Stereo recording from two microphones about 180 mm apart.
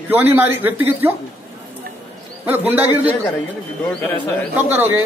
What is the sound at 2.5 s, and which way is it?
Speech, 10° right (ahead or behind).